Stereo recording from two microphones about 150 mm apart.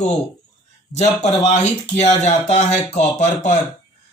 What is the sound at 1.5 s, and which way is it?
Speech, 50° left (ahead or behind).